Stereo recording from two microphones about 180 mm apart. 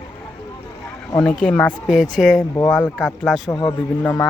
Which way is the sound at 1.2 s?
5° left (ahead or behind).